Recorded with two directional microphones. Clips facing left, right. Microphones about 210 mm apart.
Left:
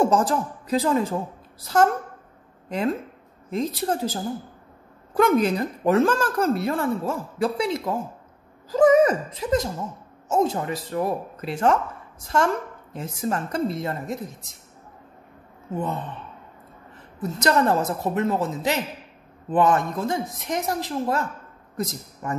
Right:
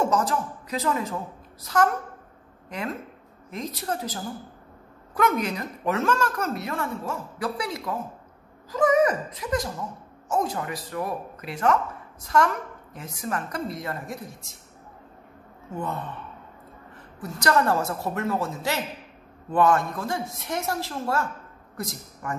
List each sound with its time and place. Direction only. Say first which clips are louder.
0.0 s a woman's voice: left 4 dB; 30° left (ahead or behind)
15.7 s speech: left 4 dB; 20° left (ahead or behind)
17.2 s a man's voice: left 2 dB; 20° left (ahead or behind)